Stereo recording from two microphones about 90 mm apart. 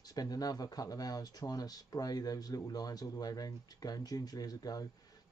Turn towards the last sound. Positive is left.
turn(degrees=45)  # may be behind; listen again after turning